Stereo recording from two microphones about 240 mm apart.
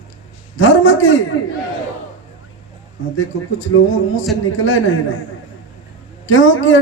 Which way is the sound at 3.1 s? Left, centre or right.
Left.